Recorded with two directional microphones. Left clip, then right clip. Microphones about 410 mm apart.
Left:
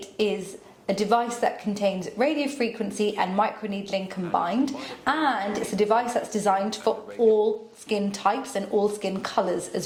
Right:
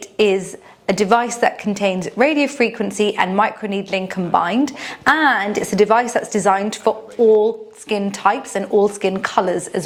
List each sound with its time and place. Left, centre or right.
0.2 s a woman's voice: right